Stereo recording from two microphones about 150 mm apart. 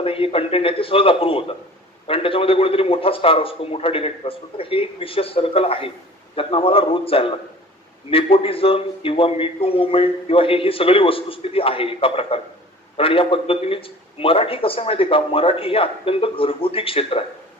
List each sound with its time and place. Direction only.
0.0 s a man's voice: 40° left (ahead or behind)